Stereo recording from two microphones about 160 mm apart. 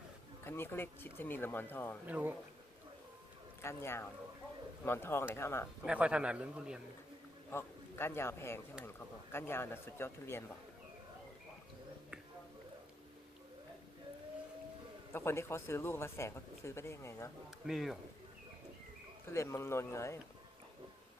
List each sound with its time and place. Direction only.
0.4 s a man's voice: 15° left (ahead or behind)
2.0 s a man's voice: 10° right (ahead or behind)
3.6 s a man's voice: 15° left (ahead or behind)
5.8 s a man's voice: 5° right (ahead or behind)
7.5 s a man's voice: 15° left (ahead or behind)
15.1 s a man's voice: 15° left (ahead or behind)
17.7 s speech: centre (ahead or behind)
19.2 s a man's voice: 15° left (ahead or behind)